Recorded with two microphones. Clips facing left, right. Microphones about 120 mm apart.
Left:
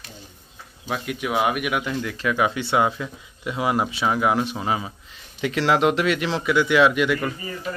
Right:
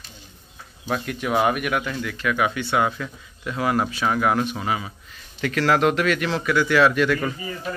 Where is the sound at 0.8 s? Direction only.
5° left (ahead or behind).